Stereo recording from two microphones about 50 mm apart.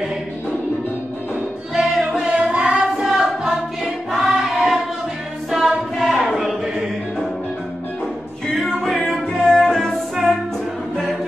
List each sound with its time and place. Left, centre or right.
1.8 s music: centre
2.4 s child singing: centre
2.8 s music: centre
4.1 s choir: centre
5.5 s music: centre
9.1 s music: centre